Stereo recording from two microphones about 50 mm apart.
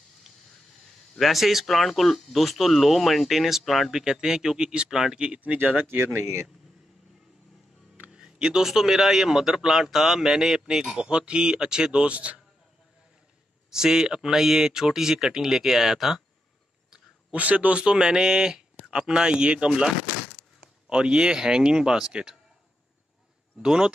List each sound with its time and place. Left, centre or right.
1.1 s speech: centre
4.0 s a man's voice: centre
5.1 s speech: right
5.4 s speech: right
8.1 s music: centre
8.6 s a man's voice: centre
11.1 s speech: right
13.7 s a man's voice: centre
17.3 s speech: right
17.9 s a man's voice: centre
20.9 s a man's voice: centre
23.6 s a man's voice: centre